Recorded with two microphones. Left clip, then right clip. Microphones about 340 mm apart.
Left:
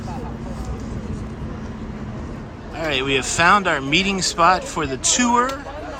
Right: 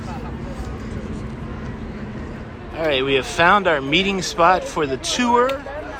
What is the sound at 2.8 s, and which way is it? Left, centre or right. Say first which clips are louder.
Speech: right 2 dB; centre.